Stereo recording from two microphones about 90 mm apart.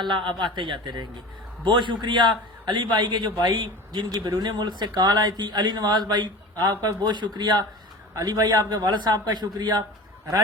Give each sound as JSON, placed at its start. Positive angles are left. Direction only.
{"t": 0.0, "sound": "a man's voice", "side_deg": -65}
{"t": 3.6, "sound": "a man's voice", "side_deg": -55}